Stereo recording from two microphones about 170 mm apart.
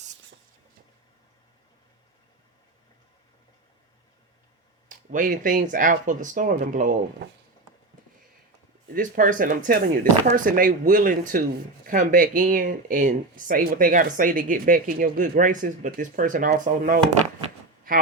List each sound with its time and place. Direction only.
4.9 s speech: 50° right (ahead or behind)
9.0 s speech: 50° right (ahead or behind)